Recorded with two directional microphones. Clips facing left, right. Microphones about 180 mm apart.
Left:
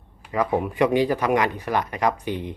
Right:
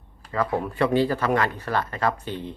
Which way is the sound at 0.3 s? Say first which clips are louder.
Left 2 dB; 15° left (ahead or behind).